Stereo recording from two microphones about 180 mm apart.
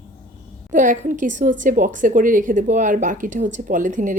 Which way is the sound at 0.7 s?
45° right (ahead or behind).